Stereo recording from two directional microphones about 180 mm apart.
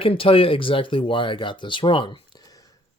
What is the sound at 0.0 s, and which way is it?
Speech, 30° left (ahead or behind).